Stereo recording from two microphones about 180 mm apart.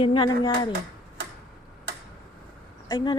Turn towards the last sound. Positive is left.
turn(degrees=20)  # may be behind; listen again after turning